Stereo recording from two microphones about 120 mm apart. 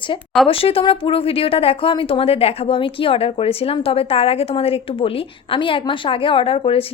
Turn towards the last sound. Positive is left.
turn(degrees=50)  # may be behind; listen again after turning